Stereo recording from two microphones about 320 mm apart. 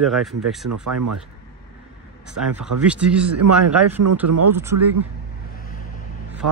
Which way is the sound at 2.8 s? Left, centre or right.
Centre.